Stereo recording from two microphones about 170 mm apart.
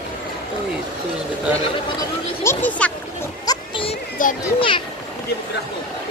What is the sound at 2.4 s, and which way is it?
Speech, 10° left (ahead or behind).